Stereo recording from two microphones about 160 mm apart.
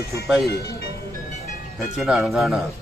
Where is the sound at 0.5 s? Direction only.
90° left.